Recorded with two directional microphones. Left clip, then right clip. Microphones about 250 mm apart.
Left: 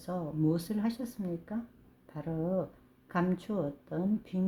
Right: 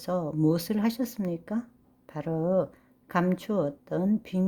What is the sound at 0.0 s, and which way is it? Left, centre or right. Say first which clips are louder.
A woman's voice: right 6 dB; right.